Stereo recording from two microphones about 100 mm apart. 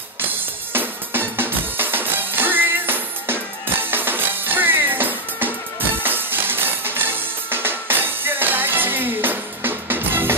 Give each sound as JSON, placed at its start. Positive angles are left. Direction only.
{"t": 0.7, "sound": "music", "side_deg": -20}